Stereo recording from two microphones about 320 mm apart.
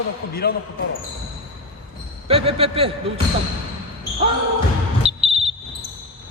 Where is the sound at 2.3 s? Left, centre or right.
Centre.